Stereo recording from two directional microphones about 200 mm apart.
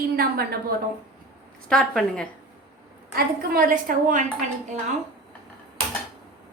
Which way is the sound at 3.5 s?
45° right (ahead or behind).